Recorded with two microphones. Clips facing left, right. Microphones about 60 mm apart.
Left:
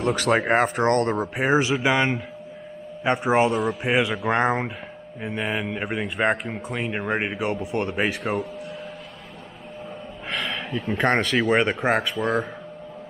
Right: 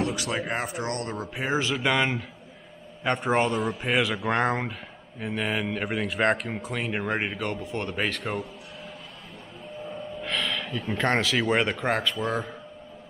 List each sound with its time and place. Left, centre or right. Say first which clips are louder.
0.0 s speech: left 7 dB; left
1.8 s a man's voice: left 3 dB; centre
7.6 s a man's voice: left 5 dB; left
8.2 s a man's voice: left 5 dB; centre
10.5 s a sound: left 2 dB; left
10.9 s a man's voice: left 3 dB; centre